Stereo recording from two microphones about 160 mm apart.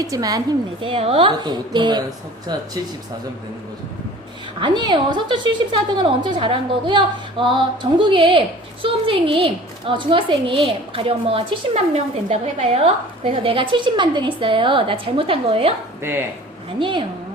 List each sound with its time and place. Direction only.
0.0 s a woman's voice: 20° right (ahead or behind)
4.6 s a woman's voice: 30° right (ahead or behind)
16.0 s speech: 15° right (ahead or behind)
16.8 s a woman's voice: 30° right (ahead or behind)